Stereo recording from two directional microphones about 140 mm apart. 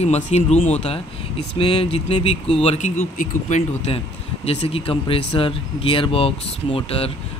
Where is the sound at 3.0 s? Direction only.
60° left (ahead or behind).